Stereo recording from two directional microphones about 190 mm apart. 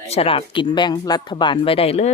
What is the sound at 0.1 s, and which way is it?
Speech, 30° left (ahead or behind).